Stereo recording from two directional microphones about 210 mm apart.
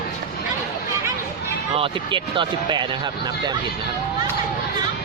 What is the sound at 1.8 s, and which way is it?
A man's voice, 25° right (ahead or behind).